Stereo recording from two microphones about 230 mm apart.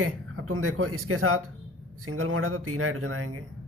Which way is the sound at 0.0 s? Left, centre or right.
Right.